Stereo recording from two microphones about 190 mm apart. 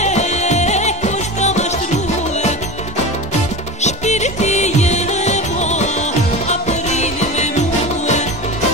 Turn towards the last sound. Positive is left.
turn(degrees=35)  # may be behind; listen again after turning